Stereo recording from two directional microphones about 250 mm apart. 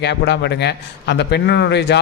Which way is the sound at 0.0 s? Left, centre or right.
Left.